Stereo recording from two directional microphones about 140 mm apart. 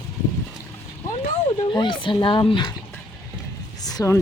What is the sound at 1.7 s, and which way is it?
Speech, 35° left (ahead or behind).